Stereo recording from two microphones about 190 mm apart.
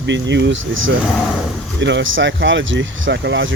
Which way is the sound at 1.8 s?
75° right (ahead or behind).